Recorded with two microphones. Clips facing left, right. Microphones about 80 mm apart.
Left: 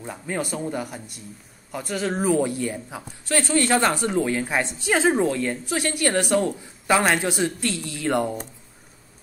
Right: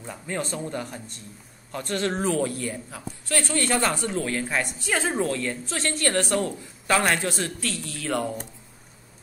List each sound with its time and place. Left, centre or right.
0.0 s a man's voice: centre
2.3 s a man's voice: centre